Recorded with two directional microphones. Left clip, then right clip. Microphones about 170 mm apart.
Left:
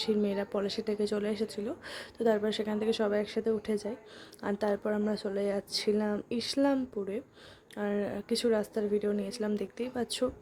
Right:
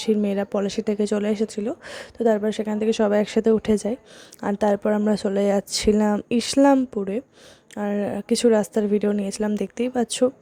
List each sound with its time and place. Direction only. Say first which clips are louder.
0.1 s speech: right 10 dB; 40° right (ahead or behind)